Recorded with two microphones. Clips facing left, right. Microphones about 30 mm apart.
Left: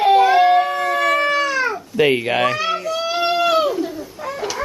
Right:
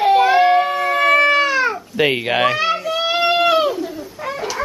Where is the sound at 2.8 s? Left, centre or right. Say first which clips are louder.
Right 2 dB; right.